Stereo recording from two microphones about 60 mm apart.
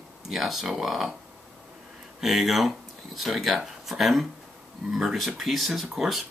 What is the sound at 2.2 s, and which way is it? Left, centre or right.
Speech, centre.